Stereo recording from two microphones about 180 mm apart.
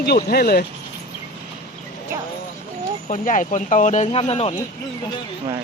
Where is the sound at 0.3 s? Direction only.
60° left (ahead or behind).